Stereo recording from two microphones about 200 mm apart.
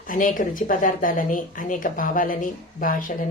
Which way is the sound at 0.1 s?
45° left (ahead or behind).